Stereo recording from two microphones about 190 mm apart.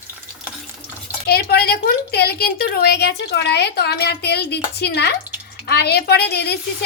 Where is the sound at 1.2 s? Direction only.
55° left (ahead or behind).